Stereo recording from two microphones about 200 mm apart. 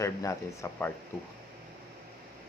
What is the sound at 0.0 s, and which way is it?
Speech, 15° left (ahead or behind).